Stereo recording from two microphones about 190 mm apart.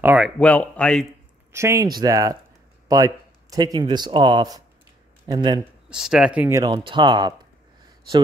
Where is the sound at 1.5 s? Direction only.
15° right (ahead or behind).